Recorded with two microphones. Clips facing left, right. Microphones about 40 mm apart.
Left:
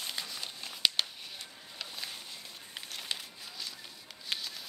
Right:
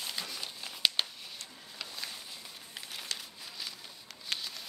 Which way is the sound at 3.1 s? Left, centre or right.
Left.